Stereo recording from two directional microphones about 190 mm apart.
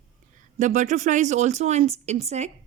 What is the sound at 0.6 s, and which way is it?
A woman's voice, 40° right (ahead or behind).